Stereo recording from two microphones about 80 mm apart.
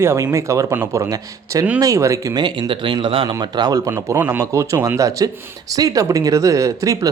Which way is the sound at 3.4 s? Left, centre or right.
Right.